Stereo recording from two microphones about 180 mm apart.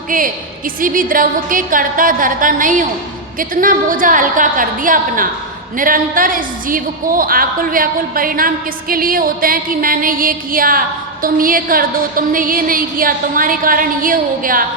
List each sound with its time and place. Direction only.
0.1 s a woman's voice: 50° right (ahead or behind)